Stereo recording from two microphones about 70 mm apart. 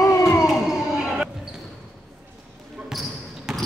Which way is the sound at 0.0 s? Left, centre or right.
Left.